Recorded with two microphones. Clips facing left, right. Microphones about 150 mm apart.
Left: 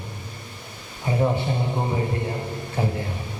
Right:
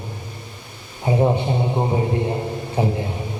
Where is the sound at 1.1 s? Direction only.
20° right (ahead or behind).